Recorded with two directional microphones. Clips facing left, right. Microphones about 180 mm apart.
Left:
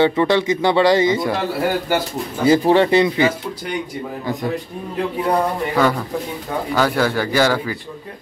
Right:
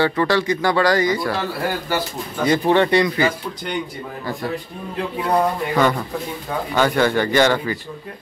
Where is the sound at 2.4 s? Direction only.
30° left (ahead or behind).